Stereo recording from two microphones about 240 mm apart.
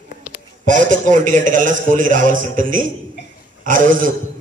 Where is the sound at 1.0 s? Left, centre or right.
Right.